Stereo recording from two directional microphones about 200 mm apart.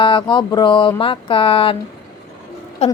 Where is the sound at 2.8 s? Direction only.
30° left (ahead or behind).